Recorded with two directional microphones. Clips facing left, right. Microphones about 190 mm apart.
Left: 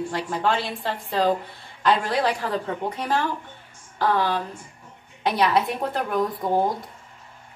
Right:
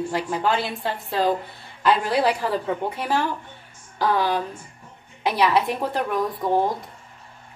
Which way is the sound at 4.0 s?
10° right (ahead or behind).